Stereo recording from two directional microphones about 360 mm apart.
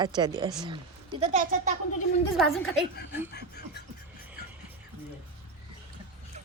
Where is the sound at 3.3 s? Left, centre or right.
Left.